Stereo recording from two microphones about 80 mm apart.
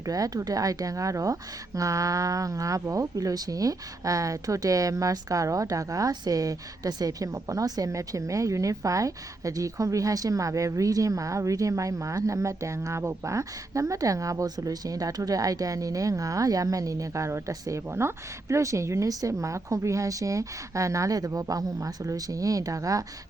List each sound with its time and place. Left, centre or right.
0.0 s speech: right